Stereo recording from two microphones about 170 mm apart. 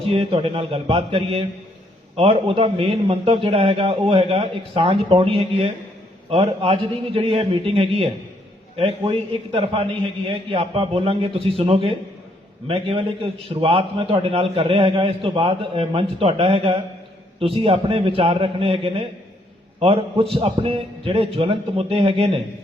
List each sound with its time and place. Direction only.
0.0 s a man's voice: 35° right (ahead or behind)